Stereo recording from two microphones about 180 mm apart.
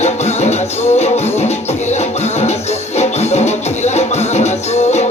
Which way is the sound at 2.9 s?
35° left (ahead or behind).